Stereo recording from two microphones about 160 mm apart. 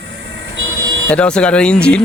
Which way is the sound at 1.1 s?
5° left (ahead or behind).